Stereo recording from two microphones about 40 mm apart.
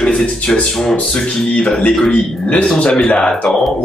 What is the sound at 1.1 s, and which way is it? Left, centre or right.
Speech, centre.